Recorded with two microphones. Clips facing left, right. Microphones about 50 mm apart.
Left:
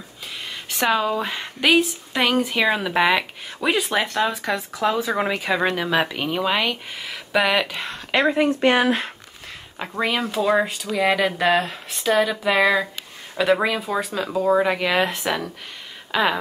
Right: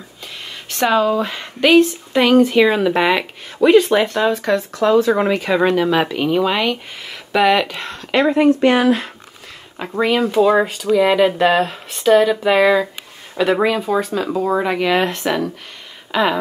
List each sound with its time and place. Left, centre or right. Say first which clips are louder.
0.7 s speech: right 5 dB; centre
8.5 s speech: right 4 dB; left
9.8 s speech: right 6 dB; centre